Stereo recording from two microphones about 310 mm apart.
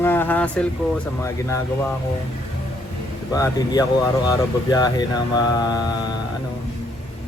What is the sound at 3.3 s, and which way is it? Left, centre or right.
Speech, centre.